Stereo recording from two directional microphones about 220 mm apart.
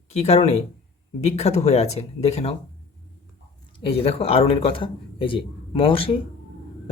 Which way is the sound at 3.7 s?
25° left (ahead or behind).